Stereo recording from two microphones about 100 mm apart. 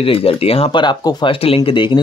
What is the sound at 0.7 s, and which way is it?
Speech, 50° left (ahead or behind).